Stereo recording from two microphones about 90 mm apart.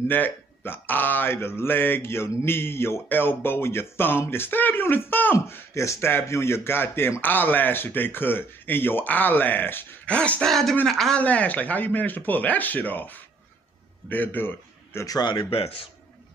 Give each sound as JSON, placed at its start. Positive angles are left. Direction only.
{"t": 0.1, "sound": "speech", "side_deg": 20}
{"t": 11.1, "sound": "a man's voice", "side_deg": 15}
{"t": 15.0, "sound": "speech", "side_deg": 50}
{"t": 15.3, "sound": "a man's voice", "side_deg": 90}